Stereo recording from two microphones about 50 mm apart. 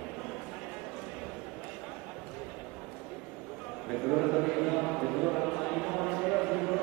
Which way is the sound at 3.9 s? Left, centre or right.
Centre.